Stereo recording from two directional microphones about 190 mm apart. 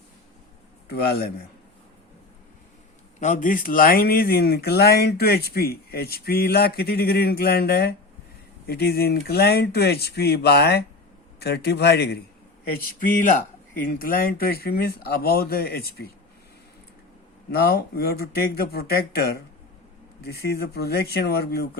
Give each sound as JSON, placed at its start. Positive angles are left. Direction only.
{"t": 0.9, "sound": "speech", "side_deg": 55}
{"t": 3.2, "sound": "speech", "side_deg": 40}
{"t": 12.8, "sound": "speech", "side_deg": 45}
{"t": 17.5, "sound": "speech", "side_deg": 50}